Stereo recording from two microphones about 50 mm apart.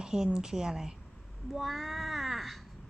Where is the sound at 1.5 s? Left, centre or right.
Centre.